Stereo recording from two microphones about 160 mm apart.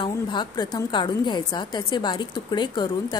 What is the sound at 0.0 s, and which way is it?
A woman's voice, 30° left (ahead or behind).